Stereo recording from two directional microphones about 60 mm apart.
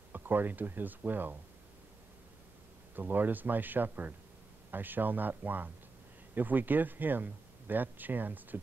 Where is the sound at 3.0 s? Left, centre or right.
Right.